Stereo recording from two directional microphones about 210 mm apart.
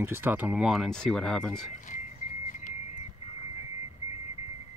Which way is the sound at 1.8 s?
40° left (ahead or behind).